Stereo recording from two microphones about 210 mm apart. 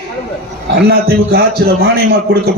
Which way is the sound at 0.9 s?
50° right (ahead or behind).